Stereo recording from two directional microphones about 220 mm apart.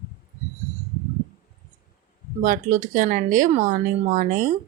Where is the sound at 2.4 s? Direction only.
35° right (ahead or behind).